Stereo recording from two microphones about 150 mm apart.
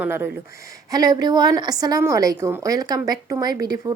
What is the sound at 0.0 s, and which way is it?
A woman's voice, 15° right (ahead or behind).